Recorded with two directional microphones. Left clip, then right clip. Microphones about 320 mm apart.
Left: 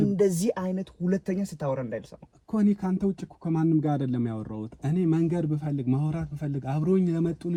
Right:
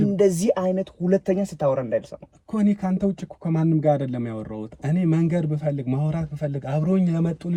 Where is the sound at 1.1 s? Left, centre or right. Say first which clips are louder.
Right 9 dB; centre.